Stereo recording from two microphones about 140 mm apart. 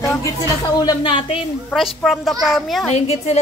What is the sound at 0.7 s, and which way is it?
Speech, 30° left (ahead or behind).